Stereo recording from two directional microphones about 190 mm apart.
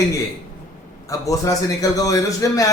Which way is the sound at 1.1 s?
20° left (ahead or behind).